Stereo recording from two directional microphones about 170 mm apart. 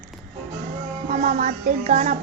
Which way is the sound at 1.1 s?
50° right (ahead or behind).